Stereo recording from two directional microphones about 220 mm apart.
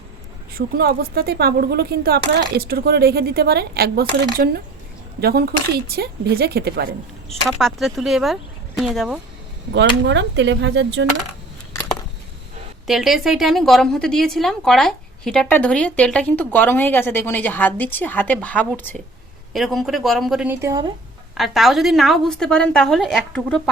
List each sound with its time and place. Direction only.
0.5 s speech: 45° right (ahead or behind)
7.4 s a woman's voice: centre (ahead or behind)
9.7 s speech: 55° right (ahead or behind)
12.9 s a woman's voice: centre (ahead or behind); by 20.9 s 15° right (ahead or behind)
21.3 s a woman's voice: centre (ahead or behind)